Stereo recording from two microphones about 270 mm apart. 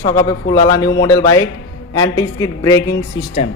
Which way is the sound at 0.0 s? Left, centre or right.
Centre.